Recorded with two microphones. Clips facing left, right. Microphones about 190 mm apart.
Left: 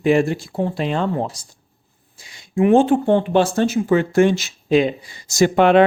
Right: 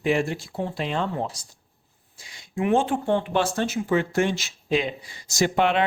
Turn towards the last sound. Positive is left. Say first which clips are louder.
# left 8 dB
turn(degrees=50)  # may be behind; listen again after turning